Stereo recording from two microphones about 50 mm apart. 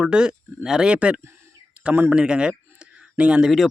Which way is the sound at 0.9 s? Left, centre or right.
Right.